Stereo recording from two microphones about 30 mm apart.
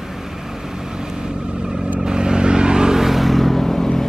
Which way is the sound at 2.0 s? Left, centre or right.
Right.